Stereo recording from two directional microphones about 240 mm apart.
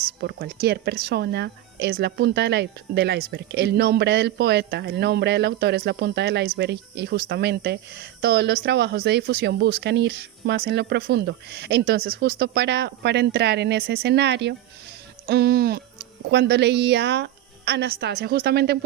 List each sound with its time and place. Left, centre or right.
0.2 s a woman's voice: right